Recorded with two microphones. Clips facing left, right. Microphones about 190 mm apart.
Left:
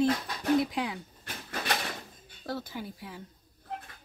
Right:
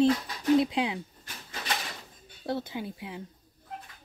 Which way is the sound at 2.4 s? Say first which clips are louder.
Right 4 dB; 20° right (ahead or behind).